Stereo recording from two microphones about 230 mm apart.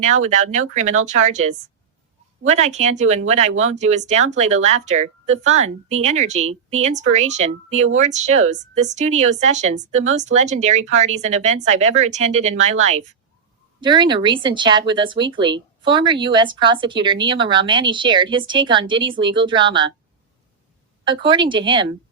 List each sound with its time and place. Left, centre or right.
0.0 s speech: right
21.0 s speech: right